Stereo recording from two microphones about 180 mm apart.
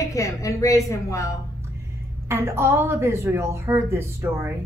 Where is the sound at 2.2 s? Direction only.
15° right (ahead or behind).